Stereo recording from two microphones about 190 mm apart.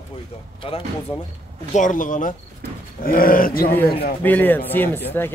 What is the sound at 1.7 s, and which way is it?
Speech, 45° left (ahead or behind).